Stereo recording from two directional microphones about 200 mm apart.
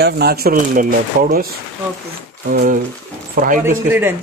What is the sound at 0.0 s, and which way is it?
Speech, 50° right (ahead or behind).